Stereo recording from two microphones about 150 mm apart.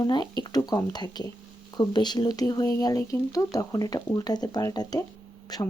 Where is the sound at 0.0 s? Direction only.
30° left (ahead or behind).